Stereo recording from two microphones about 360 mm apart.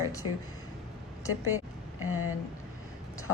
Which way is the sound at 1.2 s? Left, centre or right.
Left.